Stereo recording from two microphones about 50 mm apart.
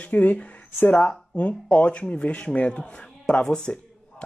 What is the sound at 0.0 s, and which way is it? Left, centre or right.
Speech, left.